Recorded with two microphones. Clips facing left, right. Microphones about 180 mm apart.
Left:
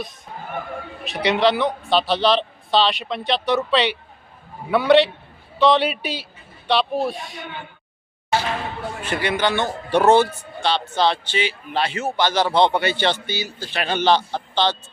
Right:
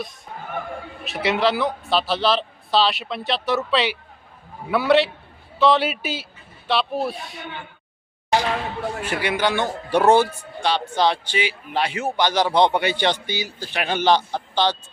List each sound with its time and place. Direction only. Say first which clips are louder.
1.0 s speech: left 2 dB; centre (ahead or behind)
8.3 s a man's voice: right 2 dB; 15° right (ahead or behind)